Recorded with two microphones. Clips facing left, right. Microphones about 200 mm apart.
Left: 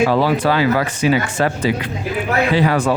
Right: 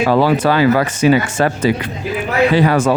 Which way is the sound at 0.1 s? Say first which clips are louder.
Right 3 dB; 50° right (ahead or behind).